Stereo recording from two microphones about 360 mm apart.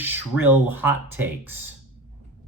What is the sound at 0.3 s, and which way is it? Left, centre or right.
Speech, centre.